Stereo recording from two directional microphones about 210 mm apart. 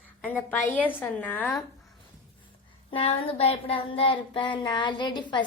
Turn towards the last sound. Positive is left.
turn(degrees=20)  # may be behind; listen again after turning